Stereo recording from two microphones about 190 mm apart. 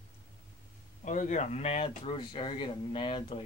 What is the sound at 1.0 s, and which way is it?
Speech, 40° left (ahead or behind).